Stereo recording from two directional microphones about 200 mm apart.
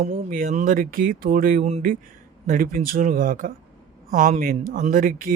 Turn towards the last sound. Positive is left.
turn(degrees=-40)  # may be behind; listen again after turning